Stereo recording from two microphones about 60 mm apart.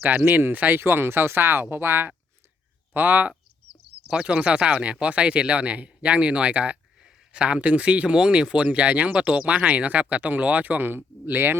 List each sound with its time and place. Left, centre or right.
0.0 s speech: right
4.1 s speech: centre; by 11.5 s right